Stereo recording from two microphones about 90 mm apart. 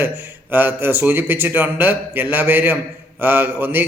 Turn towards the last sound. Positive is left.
turn(degrees=-25)  # may be behind; listen again after turning